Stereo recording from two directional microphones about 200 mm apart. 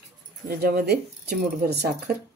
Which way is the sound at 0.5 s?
50° right (ahead or behind).